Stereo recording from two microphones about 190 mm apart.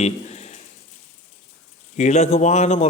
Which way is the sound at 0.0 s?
35° left (ahead or behind).